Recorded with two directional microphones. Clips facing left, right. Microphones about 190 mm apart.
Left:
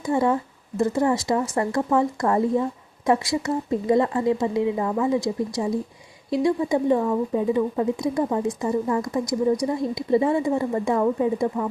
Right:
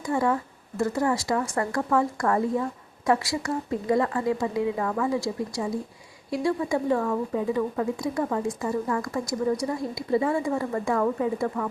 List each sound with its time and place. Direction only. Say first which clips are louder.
0.0 s speech: left 3 dB; 20° left (ahead or behind)